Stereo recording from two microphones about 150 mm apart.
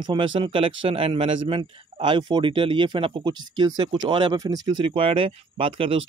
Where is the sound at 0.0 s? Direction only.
30° right (ahead or behind).